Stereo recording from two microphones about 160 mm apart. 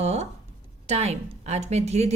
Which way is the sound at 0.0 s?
45° right (ahead or behind).